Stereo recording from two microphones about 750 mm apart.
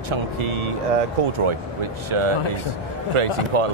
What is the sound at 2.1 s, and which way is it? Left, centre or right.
Speech, right.